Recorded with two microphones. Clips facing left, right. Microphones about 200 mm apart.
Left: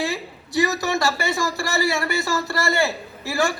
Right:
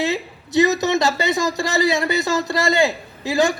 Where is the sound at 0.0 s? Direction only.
20° right (ahead or behind).